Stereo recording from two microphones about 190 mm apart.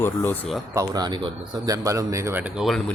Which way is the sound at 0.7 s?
20° right (ahead or behind).